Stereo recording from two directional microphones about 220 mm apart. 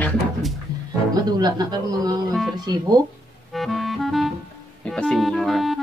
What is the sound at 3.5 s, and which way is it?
Music, centre (ahead or behind).